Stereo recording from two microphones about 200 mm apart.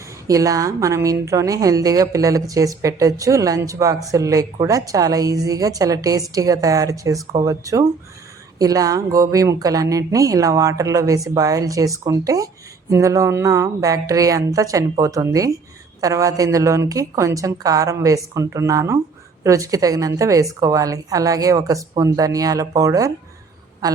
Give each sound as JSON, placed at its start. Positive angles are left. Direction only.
{"t": 0.3, "sound": "a woman's voice", "side_deg": -15}